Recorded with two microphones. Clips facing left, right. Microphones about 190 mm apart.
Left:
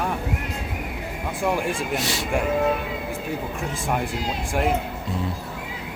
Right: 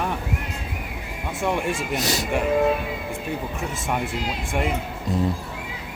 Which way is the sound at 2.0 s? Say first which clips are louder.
Right 2 dB; 40° right (ahead or behind).